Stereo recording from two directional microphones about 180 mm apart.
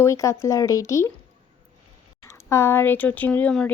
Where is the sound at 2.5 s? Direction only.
15° left (ahead or behind).